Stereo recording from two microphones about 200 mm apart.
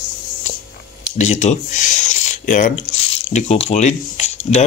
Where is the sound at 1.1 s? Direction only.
35° left (ahead or behind).